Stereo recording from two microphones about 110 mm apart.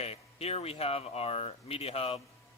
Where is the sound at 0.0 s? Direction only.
65° left (ahead or behind).